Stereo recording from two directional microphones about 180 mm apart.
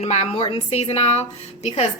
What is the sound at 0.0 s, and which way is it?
A woman's voice, 40° left (ahead or behind).